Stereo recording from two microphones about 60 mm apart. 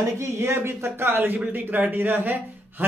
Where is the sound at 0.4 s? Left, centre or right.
Right.